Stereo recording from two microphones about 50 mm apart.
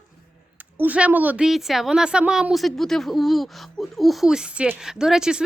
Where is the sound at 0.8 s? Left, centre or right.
Right.